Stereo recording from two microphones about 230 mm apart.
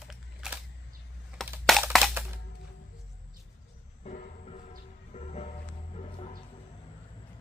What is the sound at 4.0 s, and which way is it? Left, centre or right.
Music, left.